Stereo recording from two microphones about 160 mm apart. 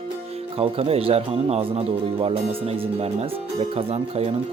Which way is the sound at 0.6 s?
40° right (ahead or behind).